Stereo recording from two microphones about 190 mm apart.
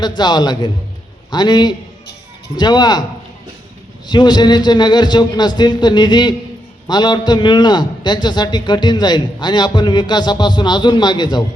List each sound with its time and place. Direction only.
0.2 s a man's voice: 20° left (ahead or behind)
4.0 s a man's voice: 20° left (ahead or behind)